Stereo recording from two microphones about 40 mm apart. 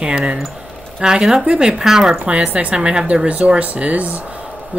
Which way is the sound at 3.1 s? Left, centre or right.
Right.